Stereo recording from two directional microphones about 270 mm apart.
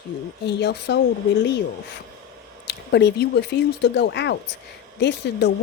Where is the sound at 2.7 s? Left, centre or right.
Left.